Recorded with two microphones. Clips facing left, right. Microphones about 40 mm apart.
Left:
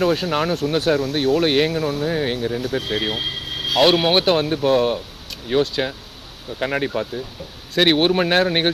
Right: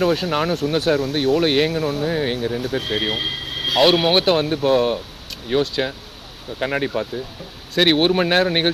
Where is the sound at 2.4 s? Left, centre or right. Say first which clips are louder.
Even; right.